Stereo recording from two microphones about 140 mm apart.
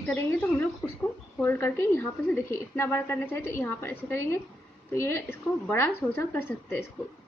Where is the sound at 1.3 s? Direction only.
15° left (ahead or behind).